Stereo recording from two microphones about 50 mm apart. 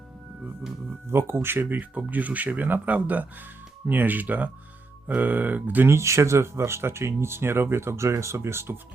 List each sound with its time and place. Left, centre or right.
1.1 s speech: right
1.8 s speech: right
5.8 s speech: right